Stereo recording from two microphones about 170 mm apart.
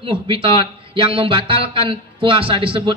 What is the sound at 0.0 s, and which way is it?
Speech, 35° right (ahead or behind).